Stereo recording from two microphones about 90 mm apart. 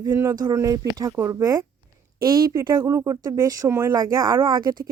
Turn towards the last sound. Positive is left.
turn(degrees=-50)  # may be behind; listen again after turning